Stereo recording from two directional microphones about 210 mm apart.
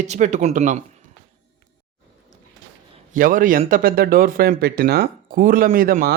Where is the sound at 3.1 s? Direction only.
40° right (ahead or behind).